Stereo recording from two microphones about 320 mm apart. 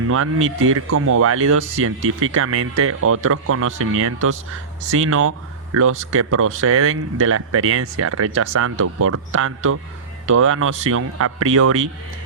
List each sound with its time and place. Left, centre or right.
0.1 s speech: right